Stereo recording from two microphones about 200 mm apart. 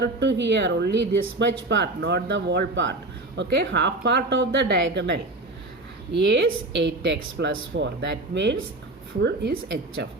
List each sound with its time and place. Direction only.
0.0 s speech: 60° right (ahead or behind)